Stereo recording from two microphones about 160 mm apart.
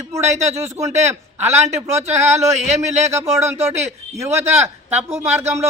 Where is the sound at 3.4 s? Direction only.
45° right (ahead or behind).